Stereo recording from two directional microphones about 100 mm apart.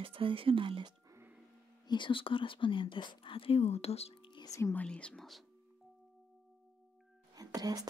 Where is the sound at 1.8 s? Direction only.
55° left (ahead or behind); by 4.2 s 90° left.